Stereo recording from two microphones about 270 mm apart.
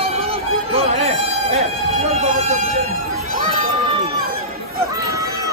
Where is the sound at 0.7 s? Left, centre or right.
Right.